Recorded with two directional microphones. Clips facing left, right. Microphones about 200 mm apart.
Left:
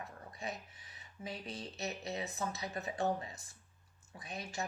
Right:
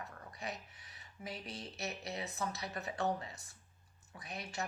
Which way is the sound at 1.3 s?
15° left (ahead or behind).